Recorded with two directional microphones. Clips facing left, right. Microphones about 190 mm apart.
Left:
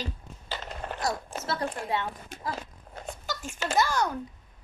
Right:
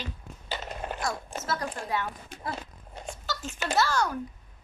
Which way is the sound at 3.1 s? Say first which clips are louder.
Right 1 dB; 15° left (ahead or behind).